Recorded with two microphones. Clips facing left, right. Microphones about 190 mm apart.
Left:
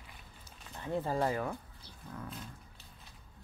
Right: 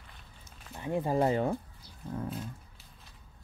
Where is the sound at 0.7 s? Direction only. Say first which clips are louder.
Right 4 dB; 15° right (ahead or behind).